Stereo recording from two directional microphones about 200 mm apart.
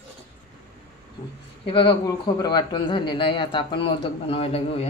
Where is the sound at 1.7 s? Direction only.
25° left (ahead or behind).